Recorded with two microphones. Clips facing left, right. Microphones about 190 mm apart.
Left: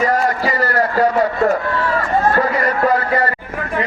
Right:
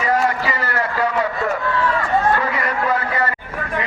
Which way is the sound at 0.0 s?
40° left (ahead or behind).